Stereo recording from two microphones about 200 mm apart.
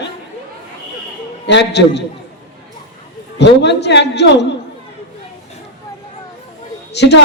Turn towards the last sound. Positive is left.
turn(degrees=55)  # may be behind; listen again after turning